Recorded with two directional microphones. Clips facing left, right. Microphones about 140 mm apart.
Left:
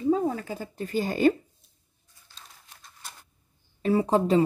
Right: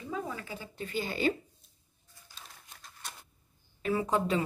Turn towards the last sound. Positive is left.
turn(degrees=35)  # may be behind; listen again after turning